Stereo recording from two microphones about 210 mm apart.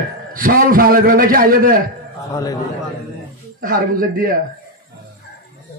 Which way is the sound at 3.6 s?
40° right (ahead or behind).